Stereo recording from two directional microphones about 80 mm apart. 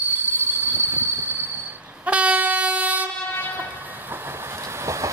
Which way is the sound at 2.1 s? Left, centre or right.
Centre.